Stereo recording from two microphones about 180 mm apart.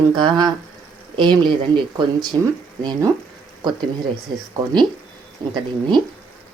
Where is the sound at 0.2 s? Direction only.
25° right (ahead or behind).